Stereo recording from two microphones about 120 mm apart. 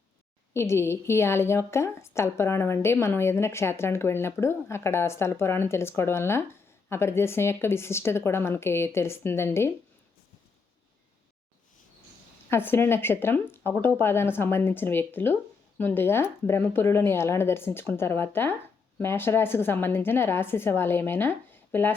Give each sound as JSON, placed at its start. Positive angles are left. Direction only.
{"t": 0.5, "sound": "a woman's voice", "side_deg": 20}
{"t": 12.5, "sound": "a woman's voice", "side_deg": 20}